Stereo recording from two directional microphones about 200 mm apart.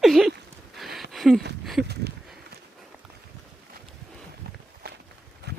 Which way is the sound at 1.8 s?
55° right (ahead or behind).